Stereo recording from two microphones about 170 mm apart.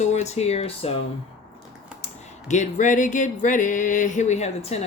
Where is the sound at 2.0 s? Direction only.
45° left (ahead or behind).